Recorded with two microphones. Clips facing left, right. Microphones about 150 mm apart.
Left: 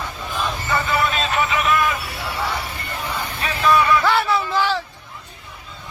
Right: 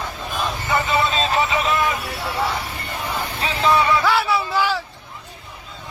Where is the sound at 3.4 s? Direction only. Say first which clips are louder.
Left 1 dB; 25° right (ahead or behind).